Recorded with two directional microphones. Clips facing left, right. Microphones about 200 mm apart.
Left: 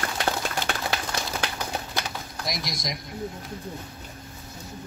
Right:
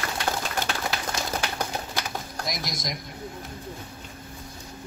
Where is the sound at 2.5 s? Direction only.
Centre (ahead or behind).